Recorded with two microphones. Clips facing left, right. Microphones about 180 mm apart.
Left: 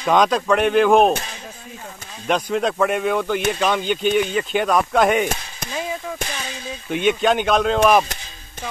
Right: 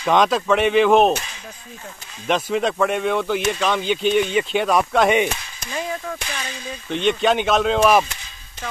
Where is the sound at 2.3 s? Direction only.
Centre (ahead or behind).